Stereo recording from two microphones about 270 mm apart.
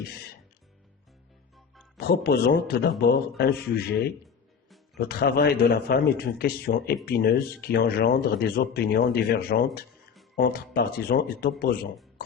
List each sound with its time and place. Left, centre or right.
1.5 s music: centre
2.0 s a man's voice: left
4.9 s a man's voice: left